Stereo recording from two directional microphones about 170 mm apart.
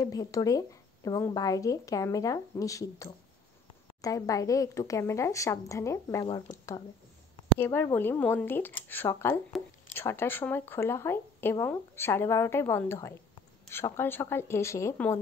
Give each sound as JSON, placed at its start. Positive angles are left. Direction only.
{"t": 0.0, "sound": "speech", "side_deg": 20}
{"t": 7.5, "sound": "speech", "side_deg": 15}